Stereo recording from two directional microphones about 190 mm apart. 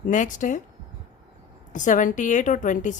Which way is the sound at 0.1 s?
40° left (ahead or behind).